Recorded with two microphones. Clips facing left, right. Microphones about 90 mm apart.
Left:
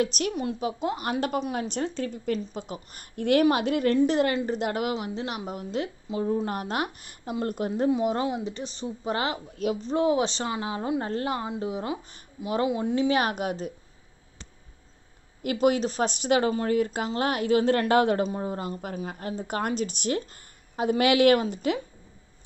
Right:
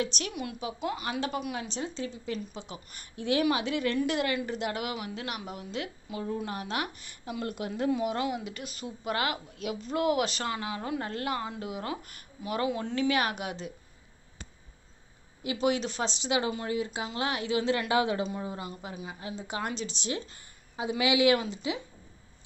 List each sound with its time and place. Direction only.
0.0 s a woman's voice: 45° left (ahead or behind)
1.7 s a woman's voice: 55° left (ahead or behind)
4.9 s speech: 30° left (ahead or behind)
5.5 s a woman's voice: 40° left (ahead or behind)
6.0 s a woman's voice: 30° left (ahead or behind)
6.5 s a woman's voice: 45° left (ahead or behind); by 11.3 s 30° left (ahead or behind)
11.3 s speech: 20° left (ahead or behind)
11.6 s a woman's voice: 30° left (ahead or behind)
13.1 s speech: 40° left (ahead or behind)
15.4 s a woman's voice: 50° left (ahead or behind)